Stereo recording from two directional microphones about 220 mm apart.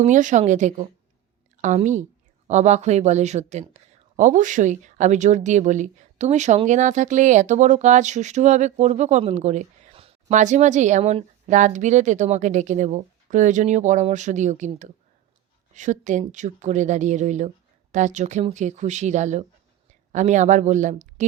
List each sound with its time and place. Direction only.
0.0 s speech: 35° right (ahead or behind)